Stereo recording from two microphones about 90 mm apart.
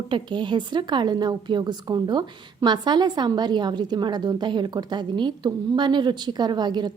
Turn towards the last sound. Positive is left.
turn(degrees=-55)  # may be behind; listen again after turning